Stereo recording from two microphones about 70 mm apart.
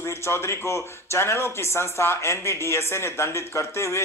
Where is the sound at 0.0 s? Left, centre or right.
Left.